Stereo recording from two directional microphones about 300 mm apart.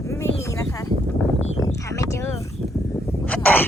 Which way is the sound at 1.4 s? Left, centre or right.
Left.